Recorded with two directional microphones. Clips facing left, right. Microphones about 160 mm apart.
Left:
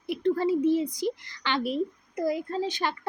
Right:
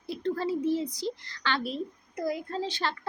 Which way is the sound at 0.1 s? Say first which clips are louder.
Left 5 dB; 15° left (ahead or behind).